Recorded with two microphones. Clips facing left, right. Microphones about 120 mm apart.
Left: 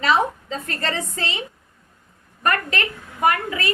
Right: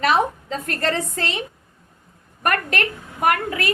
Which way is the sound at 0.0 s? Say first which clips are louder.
Right 1 dB; 60° right (ahead or behind).